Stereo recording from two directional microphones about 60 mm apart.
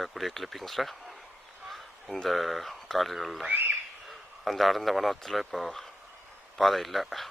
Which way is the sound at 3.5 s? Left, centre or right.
Right.